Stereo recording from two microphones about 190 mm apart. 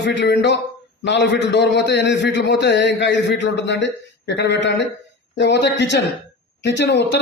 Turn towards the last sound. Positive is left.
turn(degrees=65)  # may be behind; listen again after turning